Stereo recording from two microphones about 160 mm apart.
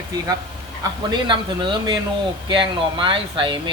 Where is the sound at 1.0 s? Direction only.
30° right (ahead or behind).